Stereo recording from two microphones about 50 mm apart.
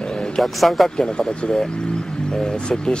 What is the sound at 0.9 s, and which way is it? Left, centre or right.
Speech, centre.